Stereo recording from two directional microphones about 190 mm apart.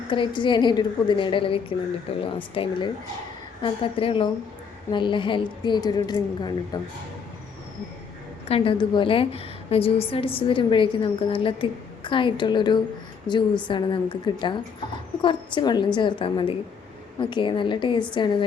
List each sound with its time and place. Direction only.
0.1 s a woman's voice: 25° left (ahead or behind)
8.4 s a woman's voice: 30° left (ahead or behind)